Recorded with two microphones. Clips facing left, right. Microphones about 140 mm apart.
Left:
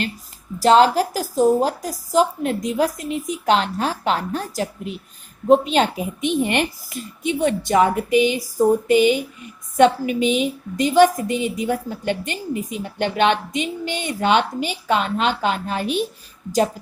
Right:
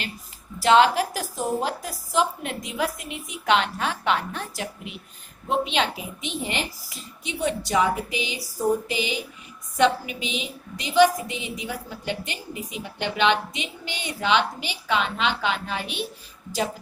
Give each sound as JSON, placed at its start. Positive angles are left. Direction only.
{"t": 0.6, "sound": "a woman's voice", "side_deg": 40}